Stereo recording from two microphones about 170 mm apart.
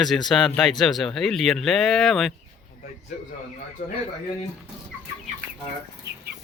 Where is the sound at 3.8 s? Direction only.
50° left (ahead or behind).